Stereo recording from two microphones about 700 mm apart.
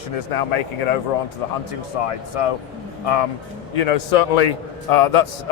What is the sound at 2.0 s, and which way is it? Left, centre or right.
Speech, left.